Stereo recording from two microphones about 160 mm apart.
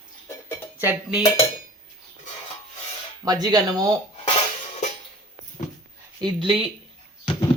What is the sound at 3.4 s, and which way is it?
Speech, 25° right (ahead or behind).